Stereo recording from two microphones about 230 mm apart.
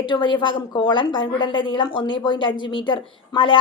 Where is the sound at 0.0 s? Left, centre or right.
Left.